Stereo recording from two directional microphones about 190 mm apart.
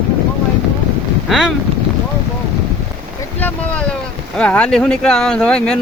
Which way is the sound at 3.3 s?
10° left (ahead or behind).